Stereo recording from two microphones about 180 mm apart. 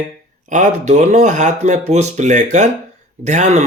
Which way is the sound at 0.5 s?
40° right (ahead or behind).